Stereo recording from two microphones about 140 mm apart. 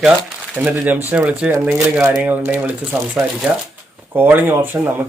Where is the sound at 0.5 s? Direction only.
10° right (ahead or behind).